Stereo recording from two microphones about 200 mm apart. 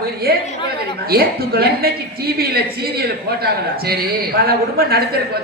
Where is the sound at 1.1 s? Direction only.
50° right (ahead or behind).